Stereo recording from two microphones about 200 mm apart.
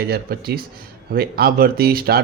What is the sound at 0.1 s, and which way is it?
Speech, 50° right (ahead or behind).